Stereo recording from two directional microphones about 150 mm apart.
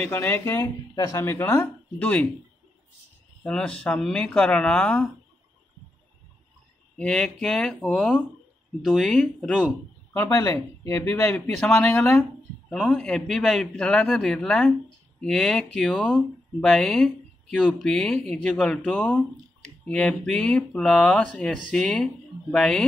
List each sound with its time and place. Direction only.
0.0 s speech: 15° left (ahead or behind)
3.4 s speech: 5° left (ahead or behind)
7.0 s speech: 5° left (ahead or behind)
10.1 s speech: 15° left (ahead or behind)